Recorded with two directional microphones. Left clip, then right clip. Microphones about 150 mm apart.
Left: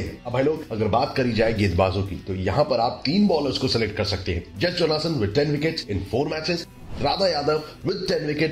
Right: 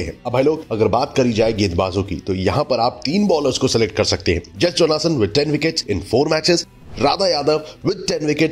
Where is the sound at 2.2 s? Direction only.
45° right (ahead or behind).